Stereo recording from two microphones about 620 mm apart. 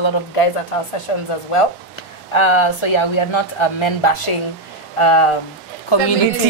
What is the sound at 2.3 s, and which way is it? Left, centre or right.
Speech, left.